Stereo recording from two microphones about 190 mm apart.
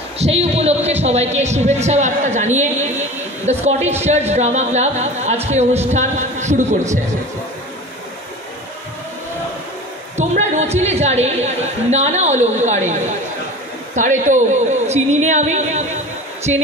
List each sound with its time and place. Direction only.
0.2 s a man's voice: 35° right (ahead or behind)
10.1 s a man's voice: 35° right (ahead or behind)
13.9 s a man's voice: 40° right (ahead or behind)